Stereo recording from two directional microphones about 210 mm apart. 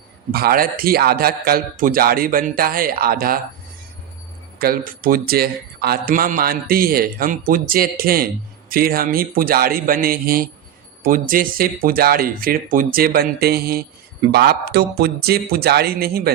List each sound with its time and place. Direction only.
0.3 s speech: 45° right (ahead or behind)
4.6 s speech: 45° right (ahead or behind)